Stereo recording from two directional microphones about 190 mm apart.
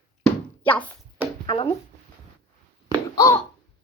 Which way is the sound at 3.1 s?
15° left (ahead or behind).